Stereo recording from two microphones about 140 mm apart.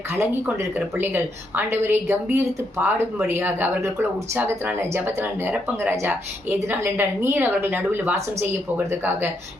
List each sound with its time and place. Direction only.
0.1 s speech: 15° right (ahead or behind)